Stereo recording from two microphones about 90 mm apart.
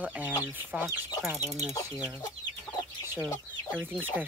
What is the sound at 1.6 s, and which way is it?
Speech, 40° left (ahead or behind).